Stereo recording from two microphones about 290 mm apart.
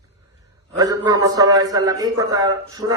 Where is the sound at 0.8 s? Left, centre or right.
Centre.